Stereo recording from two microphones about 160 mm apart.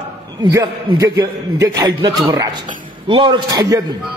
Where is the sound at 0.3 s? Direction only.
20° right (ahead or behind).